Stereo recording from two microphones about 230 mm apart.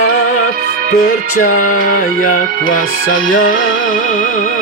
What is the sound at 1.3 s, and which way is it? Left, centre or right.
Music, left.